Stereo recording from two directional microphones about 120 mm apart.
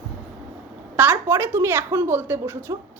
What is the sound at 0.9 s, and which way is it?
A woman's voice, 15° right (ahead or behind).